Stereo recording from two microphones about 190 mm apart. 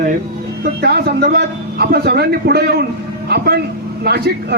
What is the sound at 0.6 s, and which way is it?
A man's voice, 60° right (ahead or behind).